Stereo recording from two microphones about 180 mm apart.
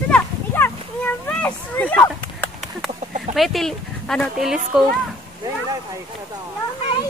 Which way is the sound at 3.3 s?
Centre (ahead or behind).